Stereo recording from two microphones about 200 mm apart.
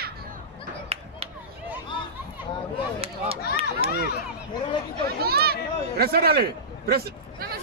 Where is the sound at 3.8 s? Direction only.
30° right (ahead or behind).